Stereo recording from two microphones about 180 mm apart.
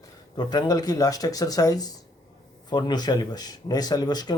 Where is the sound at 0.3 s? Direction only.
20° left (ahead or behind).